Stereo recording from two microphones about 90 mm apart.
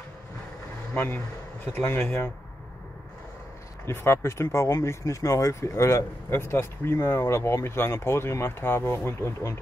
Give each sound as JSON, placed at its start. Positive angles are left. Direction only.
{"t": 0.9, "sound": "speech", "side_deg": 20}
{"t": 3.8, "sound": "speech", "side_deg": 30}